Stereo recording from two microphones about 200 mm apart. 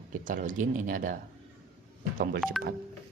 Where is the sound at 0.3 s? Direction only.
40° right (ahead or behind).